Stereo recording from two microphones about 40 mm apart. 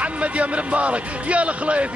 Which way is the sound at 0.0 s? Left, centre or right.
Right.